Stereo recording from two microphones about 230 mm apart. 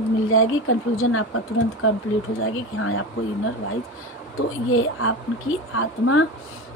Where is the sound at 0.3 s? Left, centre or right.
Left.